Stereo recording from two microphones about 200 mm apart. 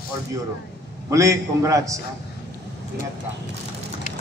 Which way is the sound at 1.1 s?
15° right (ahead or behind).